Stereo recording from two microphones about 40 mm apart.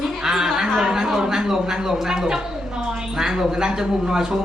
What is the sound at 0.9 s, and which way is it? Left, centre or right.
A man's voice, centre.